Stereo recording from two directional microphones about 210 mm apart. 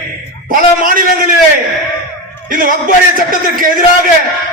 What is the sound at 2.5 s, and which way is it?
A man's voice, 40° right (ahead or behind).